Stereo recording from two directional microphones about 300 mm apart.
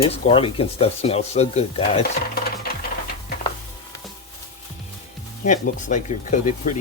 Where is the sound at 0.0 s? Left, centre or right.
Centre.